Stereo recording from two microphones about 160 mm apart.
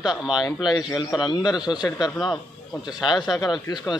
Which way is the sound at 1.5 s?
25° left (ahead or behind).